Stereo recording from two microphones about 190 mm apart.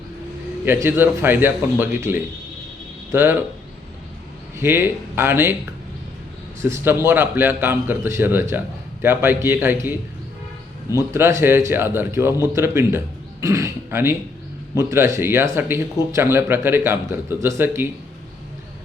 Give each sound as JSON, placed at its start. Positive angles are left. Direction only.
{"t": 0.6, "sound": "a man's voice", "side_deg": -10}
{"t": 4.5, "sound": "a man's voice", "side_deg": -10}
{"t": 6.6, "sound": "a man's voice", "side_deg": -15}
{"t": 10.9, "sound": "a man's voice", "side_deg": -15}